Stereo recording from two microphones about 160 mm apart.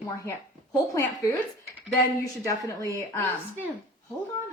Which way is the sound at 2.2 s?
20° left (ahead or behind).